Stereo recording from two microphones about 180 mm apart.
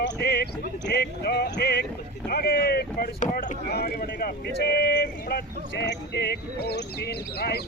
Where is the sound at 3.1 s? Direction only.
45° left (ahead or behind).